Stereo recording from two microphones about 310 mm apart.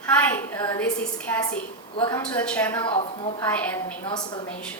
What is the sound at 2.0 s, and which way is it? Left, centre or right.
Speech, centre.